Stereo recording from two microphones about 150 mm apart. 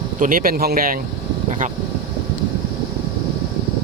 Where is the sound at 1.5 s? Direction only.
55° right (ahead or behind).